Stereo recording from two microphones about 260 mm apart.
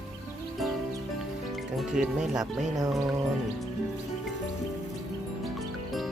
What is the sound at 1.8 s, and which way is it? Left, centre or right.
Speech, centre.